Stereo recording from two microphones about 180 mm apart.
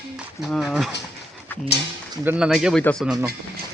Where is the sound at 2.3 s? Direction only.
5° right (ahead or behind).